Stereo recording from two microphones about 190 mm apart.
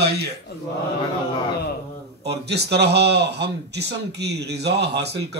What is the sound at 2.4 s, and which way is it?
Speech, 60° right (ahead or behind).